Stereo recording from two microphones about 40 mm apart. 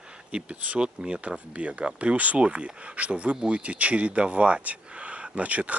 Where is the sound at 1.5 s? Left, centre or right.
Right.